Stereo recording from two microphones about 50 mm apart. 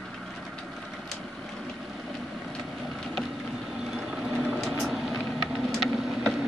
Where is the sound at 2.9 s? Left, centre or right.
Centre.